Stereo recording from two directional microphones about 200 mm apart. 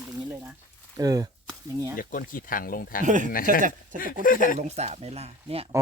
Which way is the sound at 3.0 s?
40° right (ahead or behind).